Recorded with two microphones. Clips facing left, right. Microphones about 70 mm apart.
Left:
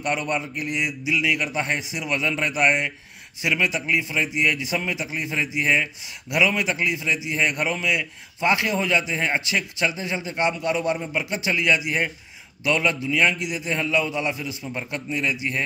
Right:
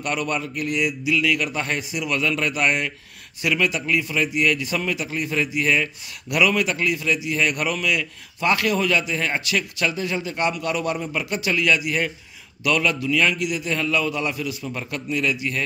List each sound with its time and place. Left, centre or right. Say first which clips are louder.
0.0 s a man's voice: even; left